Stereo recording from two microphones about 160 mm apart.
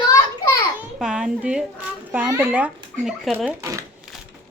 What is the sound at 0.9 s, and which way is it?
A child's voice, 5° right (ahead or behind).